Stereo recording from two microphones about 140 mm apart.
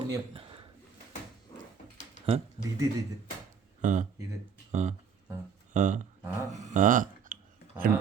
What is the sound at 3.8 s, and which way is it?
Speech, 60° right (ahead or behind).